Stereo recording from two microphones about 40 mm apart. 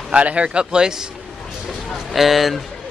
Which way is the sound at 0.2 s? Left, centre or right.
Right.